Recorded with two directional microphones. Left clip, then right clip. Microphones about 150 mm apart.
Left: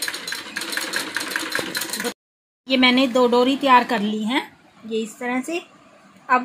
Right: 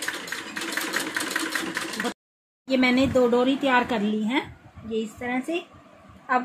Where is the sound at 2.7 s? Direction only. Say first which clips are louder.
Left 4 dB; 60° left (ahead or behind).